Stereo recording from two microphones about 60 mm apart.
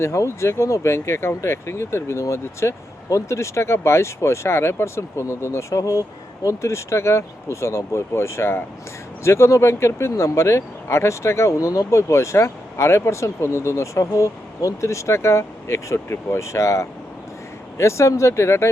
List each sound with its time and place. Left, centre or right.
0.0 s speech: left